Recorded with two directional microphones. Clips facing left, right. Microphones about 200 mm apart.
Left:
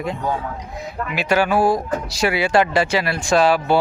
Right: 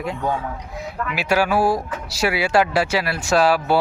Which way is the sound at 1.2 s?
10° right (ahead or behind).